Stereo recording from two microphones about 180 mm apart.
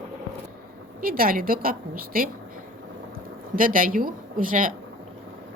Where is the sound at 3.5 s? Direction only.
50° right (ahead or behind).